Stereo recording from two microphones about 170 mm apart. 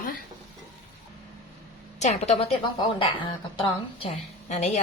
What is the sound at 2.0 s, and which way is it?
A woman's voice, 40° left (ahead or behind).